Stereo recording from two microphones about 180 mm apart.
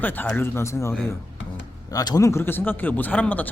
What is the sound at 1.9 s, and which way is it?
Speech, 20° left (ahead or behind).